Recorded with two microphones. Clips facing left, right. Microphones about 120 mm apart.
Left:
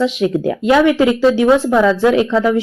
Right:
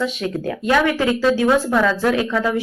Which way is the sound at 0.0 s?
25° left (ahead or behind).